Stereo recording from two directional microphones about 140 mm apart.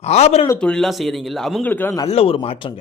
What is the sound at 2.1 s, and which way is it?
Speech, 45° left (ahead or behind).